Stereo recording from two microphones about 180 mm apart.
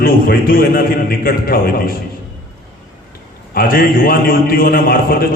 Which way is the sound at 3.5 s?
55° left (ahead or behind).